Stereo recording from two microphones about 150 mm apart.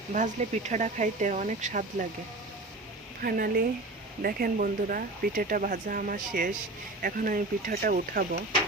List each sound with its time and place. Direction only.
0.1 s speech: 55° right (ahead or behind)
3.2 s speech: 80° right